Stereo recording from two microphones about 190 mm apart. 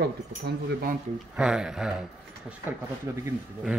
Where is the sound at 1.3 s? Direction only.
5° right (ahead or behind).